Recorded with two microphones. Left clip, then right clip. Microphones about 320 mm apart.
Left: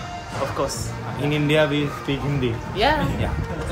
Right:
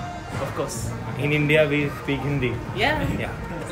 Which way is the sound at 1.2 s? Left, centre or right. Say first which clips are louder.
Even; centre.